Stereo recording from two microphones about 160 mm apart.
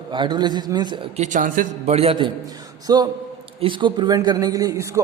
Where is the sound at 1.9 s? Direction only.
40° right (ahead or behind).